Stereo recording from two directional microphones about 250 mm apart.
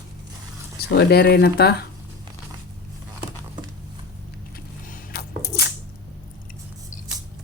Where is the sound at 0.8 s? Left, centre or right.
Left.